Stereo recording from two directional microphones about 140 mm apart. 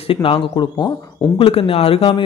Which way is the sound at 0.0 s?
40° left (ahead or behind).